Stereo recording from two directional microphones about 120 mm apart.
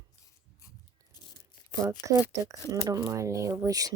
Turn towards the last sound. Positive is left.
turn(degrees=-30)  # may be behind; listen again after turning